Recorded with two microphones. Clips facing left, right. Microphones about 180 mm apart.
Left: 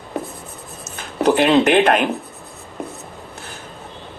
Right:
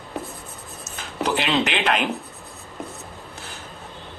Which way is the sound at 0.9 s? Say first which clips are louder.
Left 8 dB; 50° left (ahead or behind).